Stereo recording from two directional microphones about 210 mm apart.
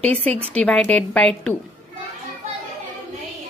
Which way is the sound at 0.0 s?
5° left (ahead or behind).